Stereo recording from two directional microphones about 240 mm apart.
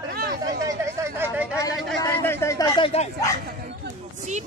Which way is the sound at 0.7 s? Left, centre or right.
Centre.